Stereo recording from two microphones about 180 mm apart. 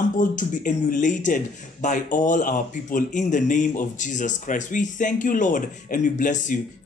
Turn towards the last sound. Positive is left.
turn(degrees=45)  # may be behind; listen again after turning